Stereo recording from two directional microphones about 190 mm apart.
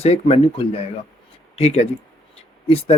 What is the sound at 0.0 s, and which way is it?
Speech, 35° left (ahead or behind).